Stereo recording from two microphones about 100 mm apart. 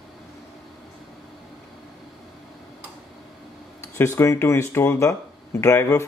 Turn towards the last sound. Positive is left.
turn(degrees=30)  # may be behind; listen again after turning